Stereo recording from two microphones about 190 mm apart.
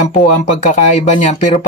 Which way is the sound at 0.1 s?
45° left (ahead or behind).